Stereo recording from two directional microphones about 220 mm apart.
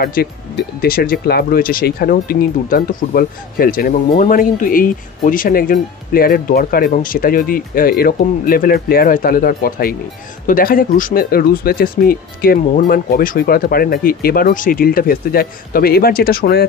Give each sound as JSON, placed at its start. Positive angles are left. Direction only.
{"t": 0.0, "sound": "speech", "side_deg": 45}